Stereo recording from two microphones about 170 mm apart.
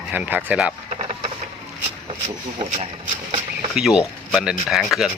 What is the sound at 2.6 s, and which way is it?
Speech, 30° right (ahead or behind).